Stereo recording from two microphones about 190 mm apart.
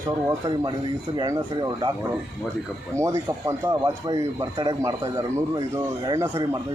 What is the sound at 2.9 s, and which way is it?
Speech, 15° right (ahead or behind).